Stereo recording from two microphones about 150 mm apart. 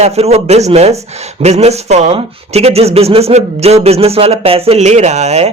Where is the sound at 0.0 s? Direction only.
45° right (ahead or behind).